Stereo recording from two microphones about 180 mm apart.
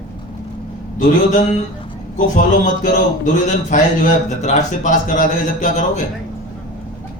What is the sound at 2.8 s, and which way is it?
A man's voice, 45° left (ahead or behind).